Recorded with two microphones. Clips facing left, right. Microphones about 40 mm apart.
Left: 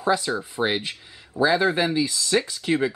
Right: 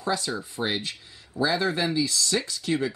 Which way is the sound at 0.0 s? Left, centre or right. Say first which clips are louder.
Left 5 dB; centre.